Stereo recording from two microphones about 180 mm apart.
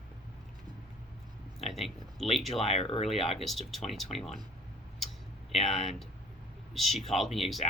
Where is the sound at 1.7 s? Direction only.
Centre (ahead or behind).